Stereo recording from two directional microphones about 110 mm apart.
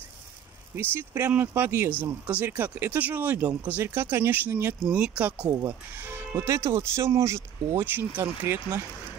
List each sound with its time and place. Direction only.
0.7 s speech: 20° right (ahead or behind)